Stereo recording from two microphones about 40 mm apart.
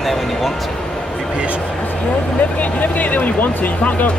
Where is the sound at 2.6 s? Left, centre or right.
Left.